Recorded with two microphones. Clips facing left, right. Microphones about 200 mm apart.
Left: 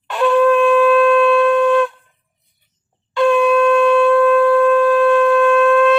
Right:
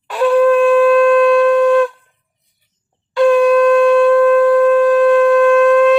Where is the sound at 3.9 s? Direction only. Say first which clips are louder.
Right 3 dB; 40° right (ahead or behind).